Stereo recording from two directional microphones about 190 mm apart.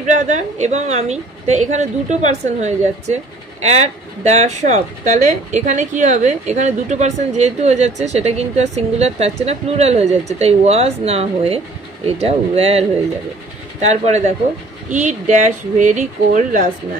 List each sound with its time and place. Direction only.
0.0 s speech: 40° right (ahead or behind)